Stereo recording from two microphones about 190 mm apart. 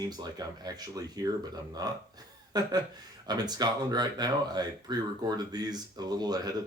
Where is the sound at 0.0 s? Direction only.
20° right (ahead or behind).